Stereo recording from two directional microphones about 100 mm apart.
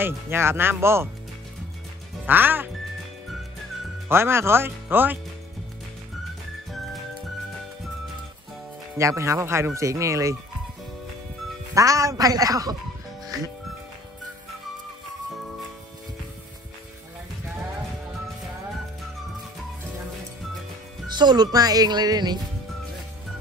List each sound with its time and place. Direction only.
0.0 s speech: 25° right (ahead or behind)
2.2 s speech: 20° right (ahead or behind)
4.1 s speech: 25° right (ahead or behind)
8.9 s speech: 30° right (ahead or behind)
11.7 s speech: 35° right (ahead or behind)
21.2 s speech: 45° right (ahead or behind)